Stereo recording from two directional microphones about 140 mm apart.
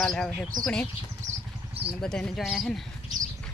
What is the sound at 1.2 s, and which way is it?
Vehicle, 60° right (ahead or behind).